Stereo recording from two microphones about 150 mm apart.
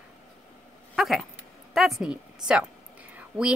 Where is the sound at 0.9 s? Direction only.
Centre (ahead or behind).